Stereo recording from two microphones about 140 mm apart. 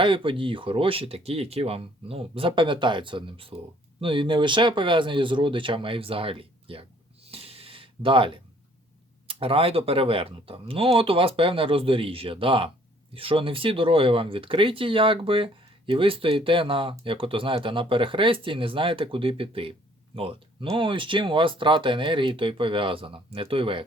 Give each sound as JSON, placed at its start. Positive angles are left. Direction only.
{"t": 0.0, "sound": "speech", "side_deg": -35}
{"t": 7.3, "sound": "a sound", "side_deg": -45}
{"t": 9.2, "sound": "speech", "side_deg": -40}